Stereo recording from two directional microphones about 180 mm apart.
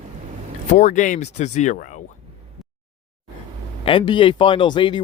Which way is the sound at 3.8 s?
30° left (ahead or behind).